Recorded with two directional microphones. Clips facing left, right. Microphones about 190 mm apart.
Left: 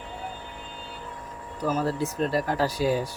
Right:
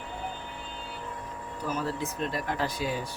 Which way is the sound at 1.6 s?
40° left (ahead or behind).